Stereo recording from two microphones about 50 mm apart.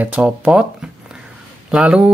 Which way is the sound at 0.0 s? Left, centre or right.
Right.